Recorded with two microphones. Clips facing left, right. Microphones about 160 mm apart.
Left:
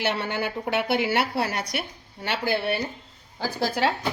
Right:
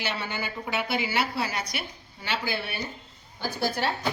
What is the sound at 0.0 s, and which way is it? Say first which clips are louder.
A woman's voice: left 6 dB; 60° left (ahead or behind).